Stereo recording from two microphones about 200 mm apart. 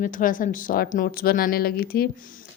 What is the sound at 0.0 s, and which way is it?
A woman's voice, 40° left (ahead or behind).